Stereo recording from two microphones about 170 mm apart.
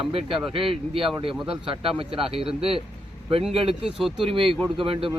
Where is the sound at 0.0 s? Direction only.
35° right (ahead or behind).